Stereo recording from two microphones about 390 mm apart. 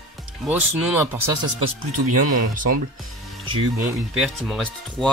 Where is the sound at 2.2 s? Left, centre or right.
Right.